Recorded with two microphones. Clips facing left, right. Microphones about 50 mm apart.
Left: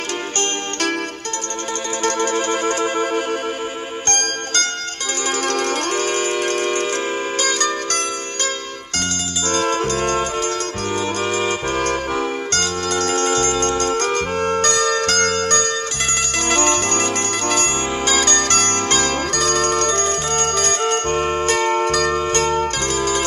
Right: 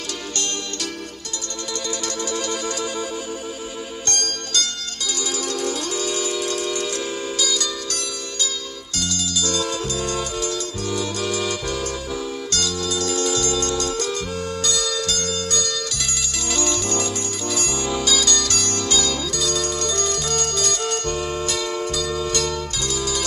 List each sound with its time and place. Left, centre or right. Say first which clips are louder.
0.4 s music: left 7 dB; left
2.0 s music: left 10 dB; left
4.1 s music: left 4 dB; left
5.4 s music: left 5 dB; left
9.5 s music: left 9 dB; left